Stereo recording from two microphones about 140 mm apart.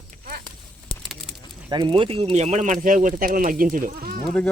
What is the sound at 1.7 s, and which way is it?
Speech, 35° right (ahead or behind).